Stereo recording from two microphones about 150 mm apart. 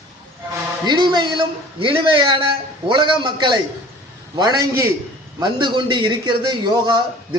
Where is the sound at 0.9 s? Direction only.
30° right (ahead or behind).